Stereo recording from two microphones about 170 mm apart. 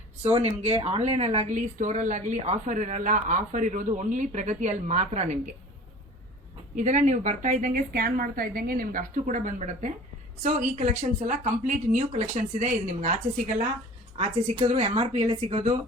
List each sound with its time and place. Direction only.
0.3 s a woman's voice: 40° right (ahead or behind)
6.7 s a woman's voice: 45° right (ahead or behind)